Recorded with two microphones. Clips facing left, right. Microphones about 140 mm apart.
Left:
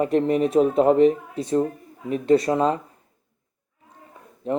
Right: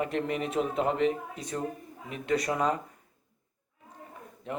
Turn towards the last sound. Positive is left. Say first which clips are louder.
# left 11 dB
turn(degrees=40)  # may be behind; listen again after turning